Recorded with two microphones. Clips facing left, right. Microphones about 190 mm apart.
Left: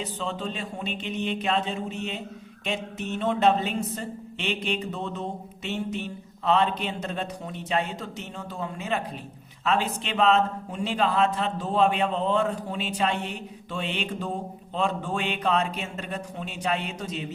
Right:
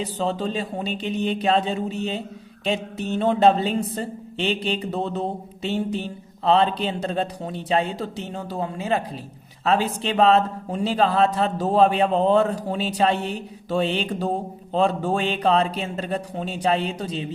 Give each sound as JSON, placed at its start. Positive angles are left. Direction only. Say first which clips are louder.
{"t": 0.0, "sound": "speech", "louder": "right 6 dB", "side_deg": -35}